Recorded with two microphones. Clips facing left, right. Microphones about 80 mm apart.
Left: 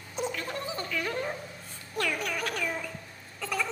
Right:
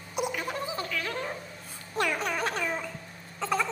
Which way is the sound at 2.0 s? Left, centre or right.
Right.